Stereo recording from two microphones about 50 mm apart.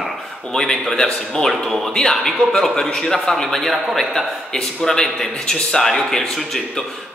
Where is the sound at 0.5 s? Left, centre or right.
Centre.